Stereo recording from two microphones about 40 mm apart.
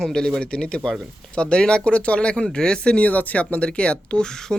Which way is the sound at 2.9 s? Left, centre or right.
Left.